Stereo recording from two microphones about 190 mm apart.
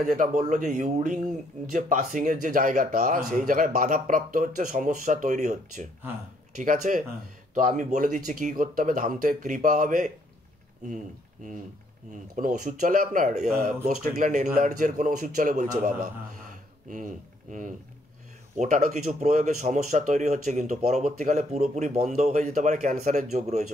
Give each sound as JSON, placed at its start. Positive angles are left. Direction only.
{"t": 0.0, "sound": "speech", "side_deg": -40}
{"t": 12.4, "sound": "speech", "side_deg": -40}
{"t": 16.9, "sound": "speech", "side_deg": -45}